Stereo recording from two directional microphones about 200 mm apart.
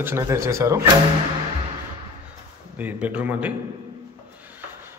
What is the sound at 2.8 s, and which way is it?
Speech, 10° right (ahead or behind).